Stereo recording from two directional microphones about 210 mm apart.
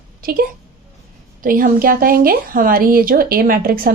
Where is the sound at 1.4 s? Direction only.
40° right (ahead or behind).